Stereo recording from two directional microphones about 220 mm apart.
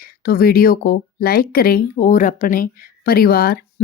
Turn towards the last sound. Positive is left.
turn(degrees=45)  # may be behind; listen again after turning